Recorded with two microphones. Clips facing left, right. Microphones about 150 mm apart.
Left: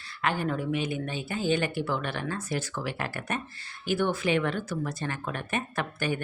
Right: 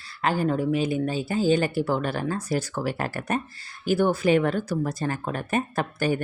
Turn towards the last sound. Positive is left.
turn(degrees=-40)  # may be behind; listen again after turning